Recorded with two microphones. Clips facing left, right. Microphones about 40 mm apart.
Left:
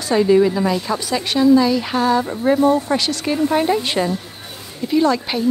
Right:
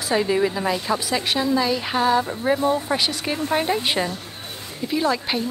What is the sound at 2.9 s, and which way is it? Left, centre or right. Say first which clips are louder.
A woman's voice: left 4 dB; centre.